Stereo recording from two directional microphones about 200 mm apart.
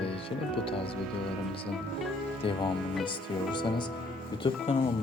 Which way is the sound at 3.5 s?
25° left (ahead or behind).